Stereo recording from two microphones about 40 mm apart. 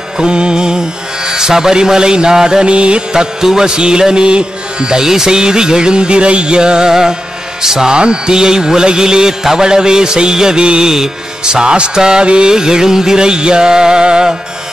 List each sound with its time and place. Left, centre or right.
0.2 s mantra: right